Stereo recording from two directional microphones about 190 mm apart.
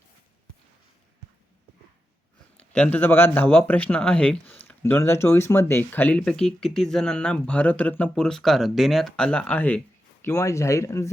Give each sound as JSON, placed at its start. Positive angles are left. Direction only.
{"t": 2.6, "sound": "a man's voice", "side_deg": 5}